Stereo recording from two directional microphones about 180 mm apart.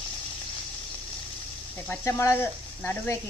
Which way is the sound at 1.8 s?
15° left (ahead or behind).